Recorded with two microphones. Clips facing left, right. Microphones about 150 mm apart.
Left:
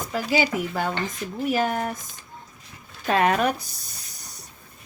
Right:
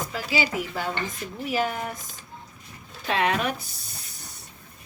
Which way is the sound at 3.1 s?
45° left (ahead or behind).